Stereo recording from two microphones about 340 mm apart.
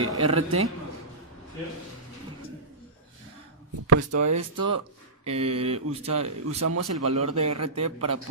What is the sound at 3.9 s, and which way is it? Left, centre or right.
Speech, right.